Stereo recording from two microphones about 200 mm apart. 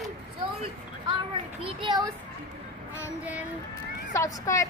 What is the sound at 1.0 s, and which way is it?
Speech, 25° right (ahead or behind).